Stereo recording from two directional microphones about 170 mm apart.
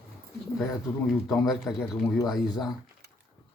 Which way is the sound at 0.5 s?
Centre (ahead or behind).